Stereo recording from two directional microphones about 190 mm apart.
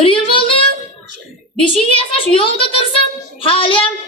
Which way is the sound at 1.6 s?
30° left (ahead or behind).